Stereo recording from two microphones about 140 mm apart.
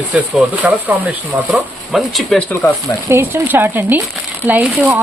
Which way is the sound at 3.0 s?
20° right (ahead or behind).